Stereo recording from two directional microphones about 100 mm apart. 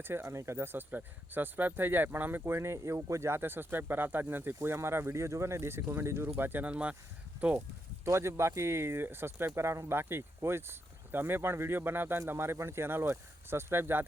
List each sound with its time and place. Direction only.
0.0 s speech: 25° right (ahead or behind)
8.0 s speech: 25° right (ahead or behind)